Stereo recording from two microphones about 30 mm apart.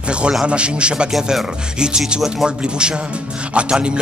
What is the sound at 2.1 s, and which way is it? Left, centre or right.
Speech, right.